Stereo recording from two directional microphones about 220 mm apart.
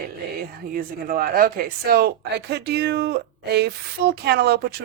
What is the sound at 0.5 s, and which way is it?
Speech, 40° right (ahead or behind).